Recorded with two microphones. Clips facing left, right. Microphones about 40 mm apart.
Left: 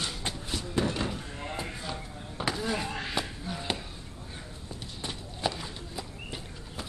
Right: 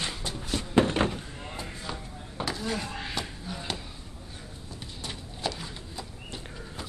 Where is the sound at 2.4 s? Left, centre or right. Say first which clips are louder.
Left 1 dB; centre.